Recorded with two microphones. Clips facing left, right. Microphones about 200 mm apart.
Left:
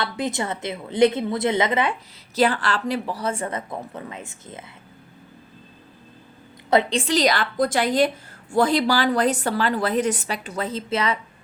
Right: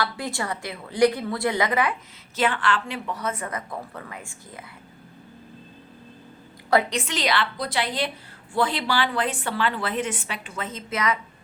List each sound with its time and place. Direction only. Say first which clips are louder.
0.0 s a woman's voice: left 3 dB; 20° left (ahead or behind)
6.7 s a woman's voice: left 2 dB; 20° left (ahead or behind)
7.0 s a woman's voice: left 5 dB; 40° left (ahead or behind)